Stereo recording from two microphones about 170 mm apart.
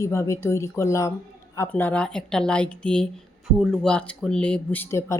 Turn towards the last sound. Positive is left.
turn(degrees=15)  # may be behind; listen again after turning